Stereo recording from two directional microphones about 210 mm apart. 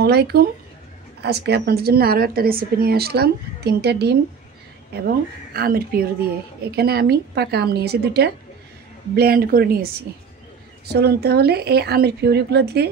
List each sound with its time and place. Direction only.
0.0 s a woman's voice: 50° right (ahead or behind)
10.9 s a woman's voice: 50° right (ahead or behind)